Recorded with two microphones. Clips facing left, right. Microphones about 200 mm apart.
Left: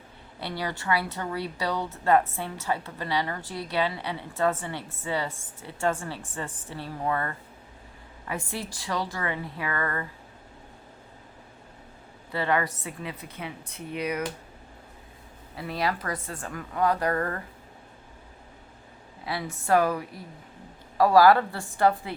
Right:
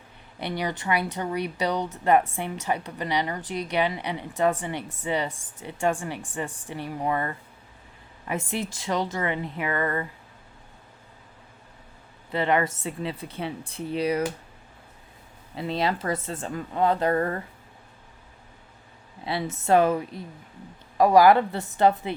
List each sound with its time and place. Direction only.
0.3 s a woman's voice: 20° right (ahead or behind)
12.3 s a woman's voice: 20° right (ahead or behind)
15.5 s a woman's voice: 25° right (ahead or behind)
19.2 s a woman's voice: 25° right (ahead or behind)